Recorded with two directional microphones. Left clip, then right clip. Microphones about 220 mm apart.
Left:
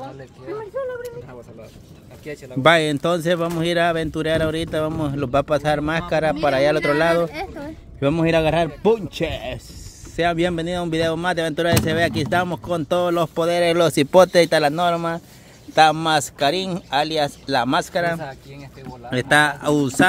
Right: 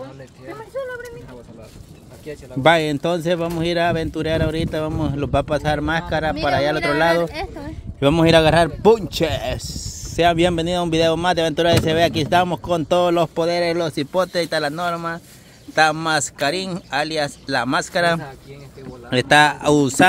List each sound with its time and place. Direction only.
2.6 s a man's voice: 5° left (ahead or behind)
7.1 s speech: centre (ahead or behind)
13.7 s a man's voice: 35° left (ahead or behind); by 17.8 s 15° left (ahead or behind)
19.0 s speech: 15° right (ahead or behind)